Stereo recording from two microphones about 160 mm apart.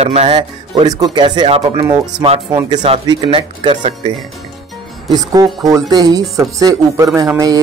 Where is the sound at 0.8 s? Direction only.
25° right (ahead or behind).